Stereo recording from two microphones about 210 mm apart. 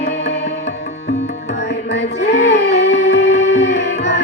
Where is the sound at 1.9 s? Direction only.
55° left (ahead or behind).